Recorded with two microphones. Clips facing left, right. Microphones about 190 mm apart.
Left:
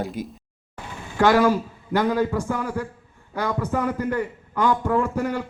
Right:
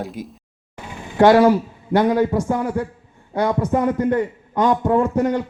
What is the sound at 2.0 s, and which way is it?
A man's voice, 15° right (ahead or behind).